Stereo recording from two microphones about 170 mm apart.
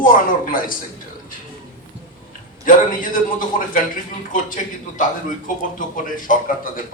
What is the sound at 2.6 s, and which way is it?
A man's voice, 55° left (ahead or behind).